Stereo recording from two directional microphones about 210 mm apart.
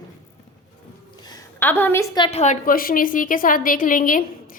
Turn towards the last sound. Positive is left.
turn(degrees=40)  # may be behind; listen again after turning